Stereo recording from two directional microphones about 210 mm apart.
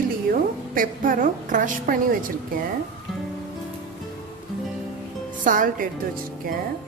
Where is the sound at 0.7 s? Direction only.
40° right (ahead or behind).